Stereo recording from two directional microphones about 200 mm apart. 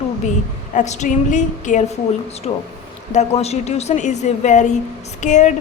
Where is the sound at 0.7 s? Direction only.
35° left (ahead or behind).